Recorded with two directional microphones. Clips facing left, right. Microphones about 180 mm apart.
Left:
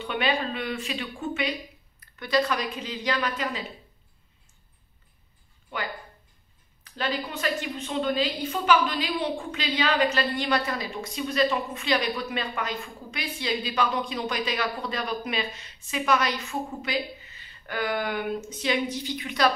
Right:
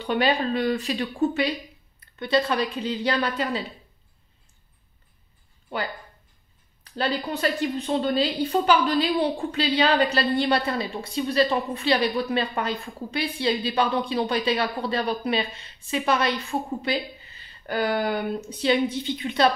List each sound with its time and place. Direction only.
0.0 s a woman's voice: 40° right (ahead or behind)
2.0 s a woman's voice: 25° right (ahead or behind)
6.8 s a woman's voice: 35° right (ahead or behind)